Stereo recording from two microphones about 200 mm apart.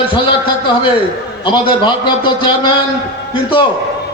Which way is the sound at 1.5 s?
25° left (ahead or behind).